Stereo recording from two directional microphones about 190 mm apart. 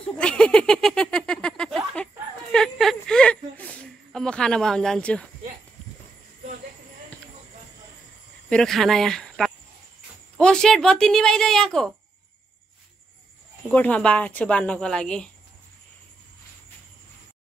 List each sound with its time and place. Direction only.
0.2 s a sound: 5° left (ahead or behind)
8.5 s a woman's voice: 5° left (ahead or behind)
13.7 s speech: 5° left (ahead or behind)